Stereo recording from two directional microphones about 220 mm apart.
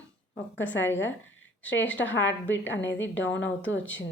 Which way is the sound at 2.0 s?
55° left (ahead or behind).